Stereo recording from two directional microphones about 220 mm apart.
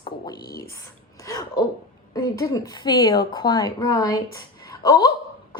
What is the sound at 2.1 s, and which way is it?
A woman's voice, 15° left (ahead or behind).